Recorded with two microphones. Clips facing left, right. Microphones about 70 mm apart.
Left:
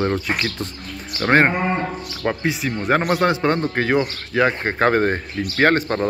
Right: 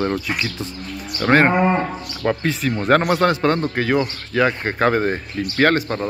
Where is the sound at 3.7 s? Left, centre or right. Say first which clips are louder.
Even; left.